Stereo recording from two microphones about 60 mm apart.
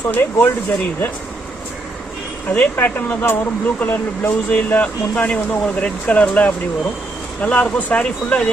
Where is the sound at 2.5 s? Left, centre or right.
Left.